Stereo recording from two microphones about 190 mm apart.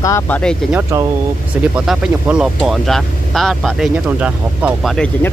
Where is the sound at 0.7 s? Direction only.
15° right (ahead or behind).